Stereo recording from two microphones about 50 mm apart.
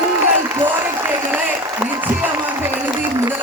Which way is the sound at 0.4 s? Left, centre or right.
Right.